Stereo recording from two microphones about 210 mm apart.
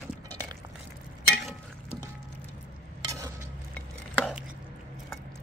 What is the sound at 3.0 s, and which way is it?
Stir, 15° right (ahead or behind).